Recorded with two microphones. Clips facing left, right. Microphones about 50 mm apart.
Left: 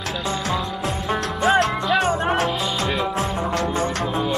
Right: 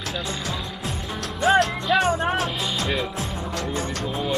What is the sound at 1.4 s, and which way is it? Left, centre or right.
Music, left.